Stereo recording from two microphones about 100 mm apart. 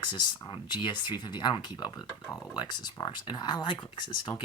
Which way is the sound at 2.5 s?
45° left (ahead or behind).